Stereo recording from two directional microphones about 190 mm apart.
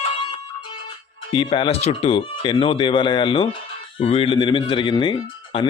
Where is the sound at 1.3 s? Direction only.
30° left (ahead or behind).